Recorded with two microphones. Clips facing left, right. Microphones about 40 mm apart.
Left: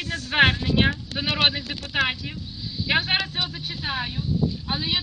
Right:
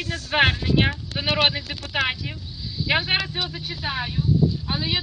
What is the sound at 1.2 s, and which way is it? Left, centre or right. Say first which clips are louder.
Speech: right 1 dB; centre.